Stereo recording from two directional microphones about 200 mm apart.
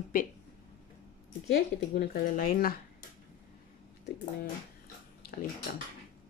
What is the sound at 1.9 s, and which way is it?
Speech, 45° left (ahead or behind).